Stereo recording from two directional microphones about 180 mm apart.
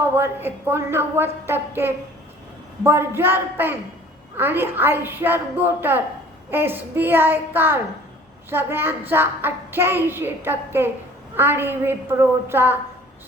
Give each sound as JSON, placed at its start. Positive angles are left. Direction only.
{"t": 0.0, "sound": "a child's voice", "side_deg": -10}